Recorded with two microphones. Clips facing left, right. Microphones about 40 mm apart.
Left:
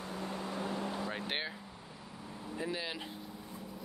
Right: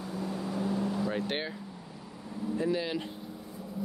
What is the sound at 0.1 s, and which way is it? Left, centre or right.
Vehicle, left.